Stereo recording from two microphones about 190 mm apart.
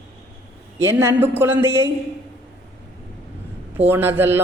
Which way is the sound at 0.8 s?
15° right (ahead or behind).